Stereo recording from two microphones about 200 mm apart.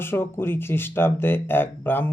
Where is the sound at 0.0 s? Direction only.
10° left (ahead or behind).